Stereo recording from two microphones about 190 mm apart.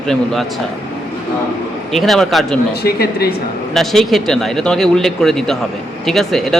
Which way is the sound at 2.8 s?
55° left (ahead or behind).